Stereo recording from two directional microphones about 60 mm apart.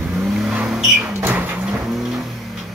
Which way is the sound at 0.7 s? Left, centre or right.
Centre.